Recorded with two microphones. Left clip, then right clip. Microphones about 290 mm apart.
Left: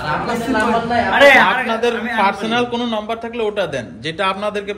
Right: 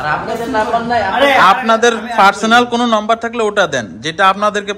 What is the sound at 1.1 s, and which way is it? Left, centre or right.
A man's voice, centre.